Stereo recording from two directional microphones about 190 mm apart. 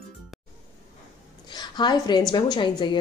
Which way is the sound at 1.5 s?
25° left (ahead or behind).